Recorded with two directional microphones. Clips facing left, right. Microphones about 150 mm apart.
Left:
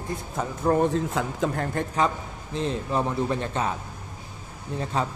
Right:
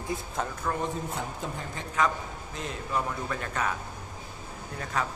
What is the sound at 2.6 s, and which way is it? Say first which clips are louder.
A man's voice: left 6 dB; 30° left (ahead or behind).